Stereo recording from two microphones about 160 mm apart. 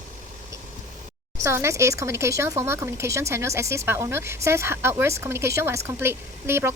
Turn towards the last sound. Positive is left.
turn(degrees=-15)  # may be behind; listen again after turning